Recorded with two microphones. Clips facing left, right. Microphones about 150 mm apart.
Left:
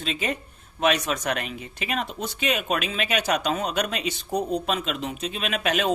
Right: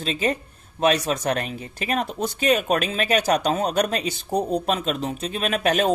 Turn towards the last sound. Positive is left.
turn(degrees=-40)  # may be behind; listen again after turning